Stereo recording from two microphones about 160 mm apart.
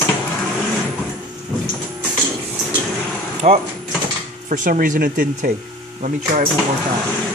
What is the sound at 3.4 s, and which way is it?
Speech, 45° right (ahead or behind).